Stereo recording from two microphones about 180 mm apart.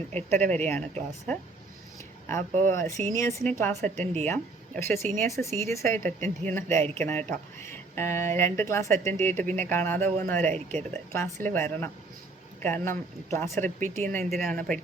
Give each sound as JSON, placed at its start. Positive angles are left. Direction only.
{"t": 0.1, "sound": "speech", "side_deg": 10}